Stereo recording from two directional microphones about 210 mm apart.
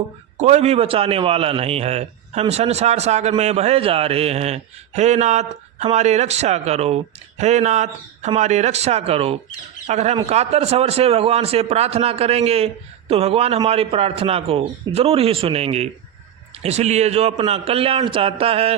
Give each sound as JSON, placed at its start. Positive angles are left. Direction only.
{"t": 0.3, "sound": "a man's voice", "side_deg": -35}